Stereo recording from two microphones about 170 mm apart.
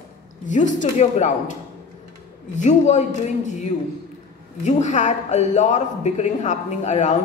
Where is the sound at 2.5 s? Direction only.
45° left (ahead or behind).